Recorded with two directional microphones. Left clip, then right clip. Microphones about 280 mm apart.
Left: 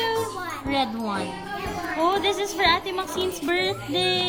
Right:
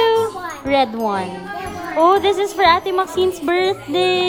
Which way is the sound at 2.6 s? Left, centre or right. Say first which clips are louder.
Right 8 dB; centre.